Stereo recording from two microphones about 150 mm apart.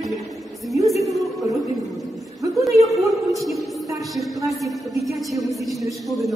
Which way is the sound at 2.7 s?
Centre (ahead or behind).